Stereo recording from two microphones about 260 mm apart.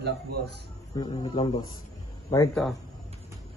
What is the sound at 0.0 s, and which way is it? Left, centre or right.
Speech, right.